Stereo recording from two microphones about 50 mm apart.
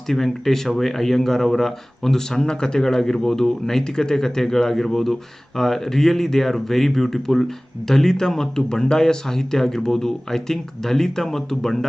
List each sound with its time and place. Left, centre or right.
0.1 s speech: centre